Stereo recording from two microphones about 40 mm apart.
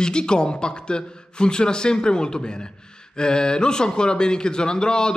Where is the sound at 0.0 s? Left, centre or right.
Left.